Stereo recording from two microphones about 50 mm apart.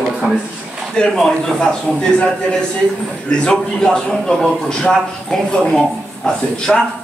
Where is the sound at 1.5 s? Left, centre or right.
Centre.